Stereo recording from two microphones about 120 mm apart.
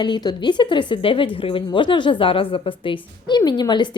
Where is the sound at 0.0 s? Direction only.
35° left (ahead or behind).